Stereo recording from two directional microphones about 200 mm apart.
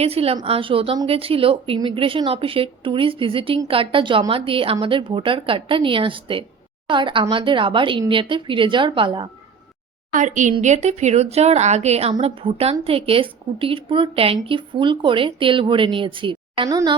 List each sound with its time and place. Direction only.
0.0 s a woman's voice: 30° right (ahead or behind)
10.1 s a woman's voice: 40° right (ahead or behind); by 17.0 s 20° right (ahead or behind)